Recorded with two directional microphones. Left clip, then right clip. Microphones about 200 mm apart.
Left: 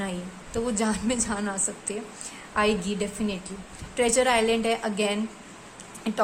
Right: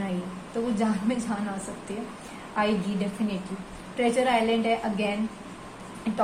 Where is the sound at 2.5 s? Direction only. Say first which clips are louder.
Left 2 dB; 50° left (ahead or behind).